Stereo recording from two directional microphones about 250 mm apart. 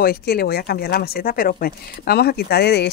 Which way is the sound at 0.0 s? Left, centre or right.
Left.